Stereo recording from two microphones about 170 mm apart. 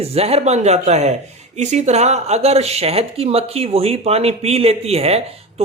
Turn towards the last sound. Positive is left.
turn(degrees=-35)  # may be behind; listen again after turning